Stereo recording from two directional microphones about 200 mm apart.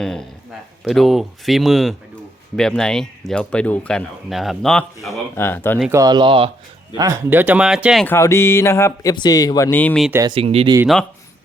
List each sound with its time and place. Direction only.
0.0 s speech: 5° left (ahead or behind)
5.9 s speech: 20° right (ahead or behind); by 8.0 s 5° right (ahead or behind)
8.0 s speech: 10° left (ahead or behind)
10.1 s speech: 15° right (ahead or behind)
10.3 s speech: 30° right (ahead or behind)